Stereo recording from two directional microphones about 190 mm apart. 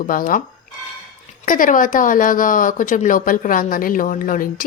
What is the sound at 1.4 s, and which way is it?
Speech, 45° left (ahead or behind).